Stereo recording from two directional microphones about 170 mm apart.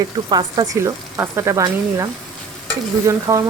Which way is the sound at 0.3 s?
25° right (ahead or behind).